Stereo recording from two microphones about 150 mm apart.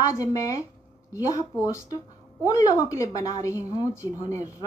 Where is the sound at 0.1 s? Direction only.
20° left (ahead or behind).